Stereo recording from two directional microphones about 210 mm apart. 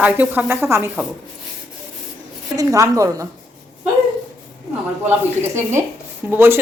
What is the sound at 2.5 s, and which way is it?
Speech, 15° right (ahead or behind).